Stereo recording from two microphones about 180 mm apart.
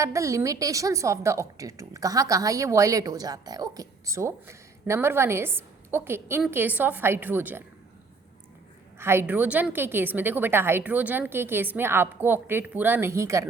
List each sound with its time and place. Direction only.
0.0 s a woman's voice: 15° right (ahead or behind)
9.0 s a woman's voice: 15° right (ahead or behind)